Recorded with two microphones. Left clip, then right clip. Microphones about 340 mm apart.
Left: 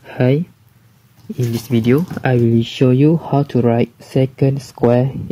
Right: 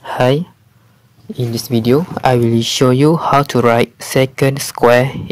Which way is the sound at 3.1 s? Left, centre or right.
Right.